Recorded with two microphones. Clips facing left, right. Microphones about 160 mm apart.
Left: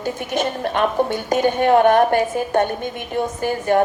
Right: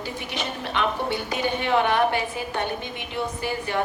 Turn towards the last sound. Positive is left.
turn(degrees=50)  # may be behind; listen again after turning